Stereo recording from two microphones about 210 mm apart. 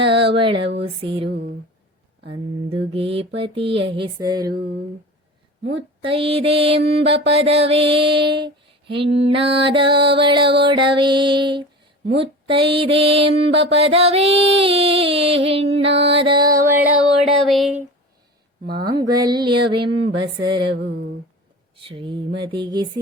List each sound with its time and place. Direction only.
0.0 s a sound: 25° right (ahead or behind)
0.9 s mantra: 25° right (ahead or behind)
2.9 s mantra: 25° right (ahead or behind)
6.0 s mantra: 25° right (ahead or behind)
8.4 s a sound: 25° right (ahead or behind)
9.1 s mantra: 25° right (ahead or behind)
17.2 s a sound: centre (ahead or behind)
18.6 s speech: 50° right (ahead or behind)
18.9 s mantra: 20° right (ahead or behind)
21.8 s mantra: 25° right (ahead or behind)